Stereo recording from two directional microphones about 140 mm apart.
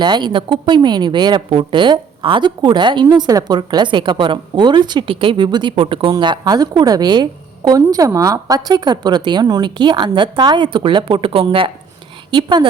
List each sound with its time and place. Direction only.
0.0 s a woman's voice: 30° right (ahead or behind)